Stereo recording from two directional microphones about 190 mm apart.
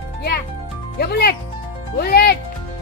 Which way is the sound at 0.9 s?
55° left (ahead or behind).